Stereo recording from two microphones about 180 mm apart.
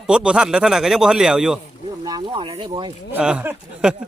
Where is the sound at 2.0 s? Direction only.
20° right (ahead or behind).